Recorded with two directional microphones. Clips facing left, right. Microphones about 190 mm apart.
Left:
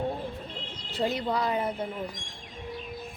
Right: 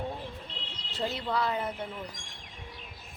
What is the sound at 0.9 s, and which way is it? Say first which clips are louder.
Speech: left 3 dB; 15° left (ahead or behind).